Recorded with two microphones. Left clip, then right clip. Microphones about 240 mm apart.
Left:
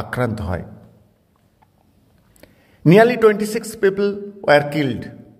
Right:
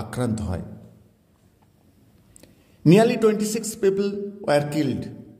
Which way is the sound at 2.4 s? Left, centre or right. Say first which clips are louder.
Left 3 dB; left.